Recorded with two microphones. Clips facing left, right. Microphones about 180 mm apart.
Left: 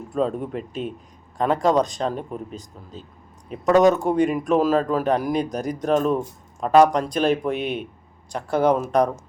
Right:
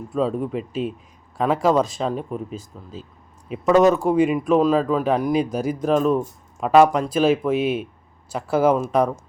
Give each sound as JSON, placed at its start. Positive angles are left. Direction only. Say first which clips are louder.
{"t": 0.1, "sound": "speech", "louder": "right 1 dB", "side_deg": 0}